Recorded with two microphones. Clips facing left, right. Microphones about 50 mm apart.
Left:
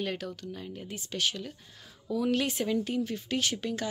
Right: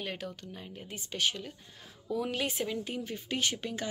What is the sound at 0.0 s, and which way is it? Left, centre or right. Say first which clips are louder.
Speech: left 4 dB; centre.